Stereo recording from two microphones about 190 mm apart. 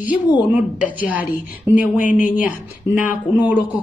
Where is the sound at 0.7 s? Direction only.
45° left (ahead or behind).